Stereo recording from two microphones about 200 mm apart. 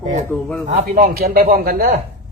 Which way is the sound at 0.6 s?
40° right (ahead or behind).